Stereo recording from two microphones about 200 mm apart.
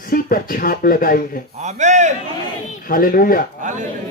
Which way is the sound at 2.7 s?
45° left (ahead or behind).